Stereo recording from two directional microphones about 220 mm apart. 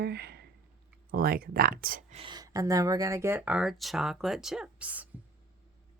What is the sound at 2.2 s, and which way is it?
Speech, 20° right (ahead or behind).